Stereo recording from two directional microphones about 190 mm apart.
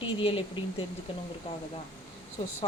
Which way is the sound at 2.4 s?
25° left (ahead or behind).